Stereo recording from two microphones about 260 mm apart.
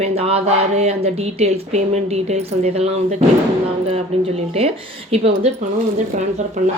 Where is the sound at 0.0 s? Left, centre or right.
Right.